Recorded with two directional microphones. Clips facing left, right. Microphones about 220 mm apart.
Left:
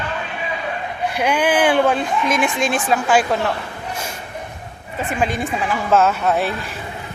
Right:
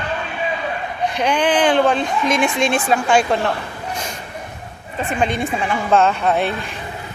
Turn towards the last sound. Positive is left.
turn(degrees=0)  # may be behind; listen again after turning